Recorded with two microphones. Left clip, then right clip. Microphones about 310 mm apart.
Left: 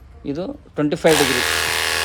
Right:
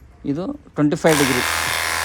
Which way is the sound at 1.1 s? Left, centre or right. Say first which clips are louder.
Left 1 dB; centre.